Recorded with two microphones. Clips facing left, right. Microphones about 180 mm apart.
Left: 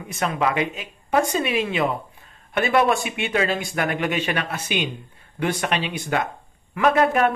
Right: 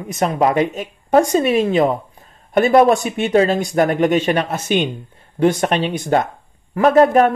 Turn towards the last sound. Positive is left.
turn(degrees=-40)  # may be behind; listen again after turning